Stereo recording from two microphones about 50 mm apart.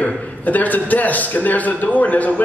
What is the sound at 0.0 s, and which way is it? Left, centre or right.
A man's voice, left.